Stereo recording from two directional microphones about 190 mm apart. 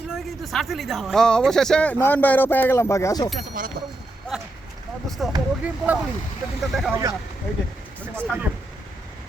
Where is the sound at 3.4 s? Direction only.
45° right (ahead or behind).